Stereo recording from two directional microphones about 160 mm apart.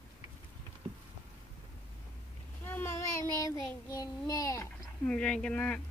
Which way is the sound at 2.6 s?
15° left (ahead or behind).